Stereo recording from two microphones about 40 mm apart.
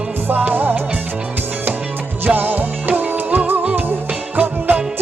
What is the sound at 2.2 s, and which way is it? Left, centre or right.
Music, right.